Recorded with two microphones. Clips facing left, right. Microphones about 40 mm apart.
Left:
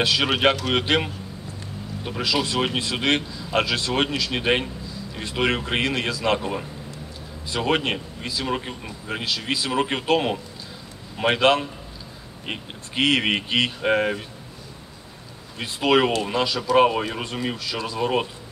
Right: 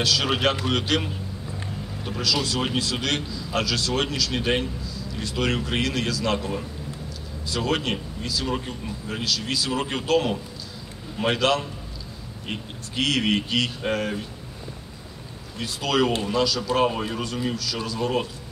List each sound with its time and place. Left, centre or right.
0.0 s a man's voice: left
15.6 s a man's voice: left